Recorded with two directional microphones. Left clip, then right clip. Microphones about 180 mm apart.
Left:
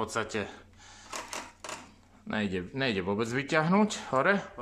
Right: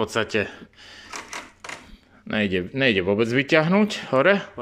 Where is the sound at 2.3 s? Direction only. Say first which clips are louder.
Right 9 dB; 10° right (ahead or behind).